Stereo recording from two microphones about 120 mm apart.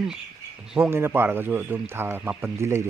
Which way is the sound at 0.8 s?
20° right (ahead or behind).